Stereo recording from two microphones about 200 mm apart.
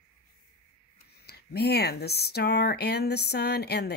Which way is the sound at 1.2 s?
55° left (ahead or behind).